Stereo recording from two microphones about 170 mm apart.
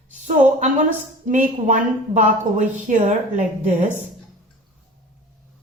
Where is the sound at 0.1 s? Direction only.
45° right (ahead or behind).